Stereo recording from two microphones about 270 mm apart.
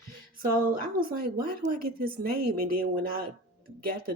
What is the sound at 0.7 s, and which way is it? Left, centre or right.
Speech, right.